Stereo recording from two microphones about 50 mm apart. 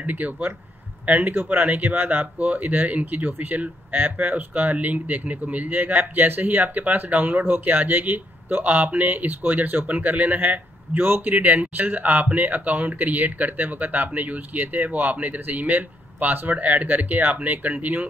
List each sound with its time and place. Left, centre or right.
0.0 s speech: right
1.2 s speech: right
1.5 s speech: right